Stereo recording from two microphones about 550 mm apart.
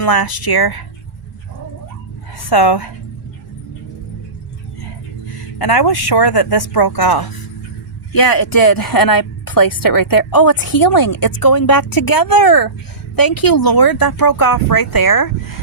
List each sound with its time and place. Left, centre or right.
0.0 s speech: left
2.4 s a woman's voice: left
5.3 s speech: left